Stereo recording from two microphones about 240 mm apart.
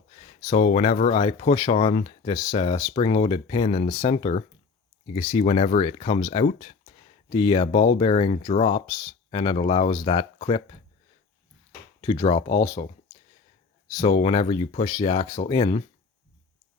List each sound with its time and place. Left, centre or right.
0.3 s speech: left
2.3 s speech: centre
11.9 s speech: centre
14.0 s speech: left